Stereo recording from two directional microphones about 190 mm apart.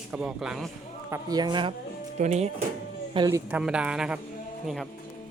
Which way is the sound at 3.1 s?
20° right (ahead or behind).